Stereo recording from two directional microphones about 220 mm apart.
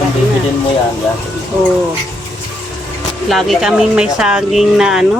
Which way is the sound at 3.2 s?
Centre (ahead or behind).